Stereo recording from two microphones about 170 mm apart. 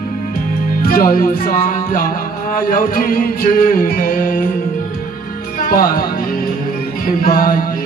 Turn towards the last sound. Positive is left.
turn(degrees=60)  # may be behind; listen again after turning